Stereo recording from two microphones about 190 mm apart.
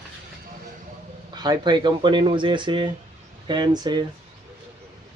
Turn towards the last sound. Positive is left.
turn(degrees=-20)  # may be behind; listen again after turning